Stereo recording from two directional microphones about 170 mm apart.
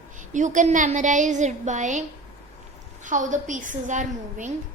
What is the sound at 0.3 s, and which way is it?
A woman's voice, 45° right (ahead or behind).